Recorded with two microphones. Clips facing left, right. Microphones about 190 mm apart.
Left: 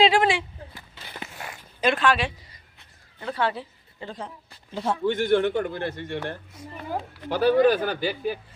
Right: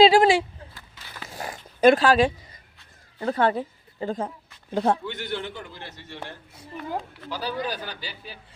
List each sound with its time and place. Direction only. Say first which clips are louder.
0.0 s speech: right 4 dB; 35° right (ahead or behind)
1.3 s zipper: right 4 dB; 35° right (ahead or behind)
3.2 s speech: right 4 dB; 45° right (ahead or behind)
4.7 s speech: right 5 dB; 60° right (ahead or behind)
5.0 s a man's voice: left 11 dB; 50° left (ahead or behind)